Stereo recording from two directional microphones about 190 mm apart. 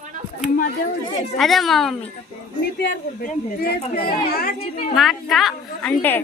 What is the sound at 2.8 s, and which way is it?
Speech, 50° left (ahead or behind).